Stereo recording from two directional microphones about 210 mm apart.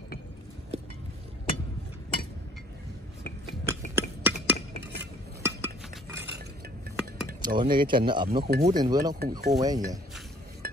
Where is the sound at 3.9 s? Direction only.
10° right (ahead or behind).